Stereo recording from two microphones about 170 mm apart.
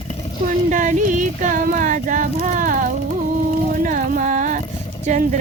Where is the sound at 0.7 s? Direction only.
50° right (ahead or behind).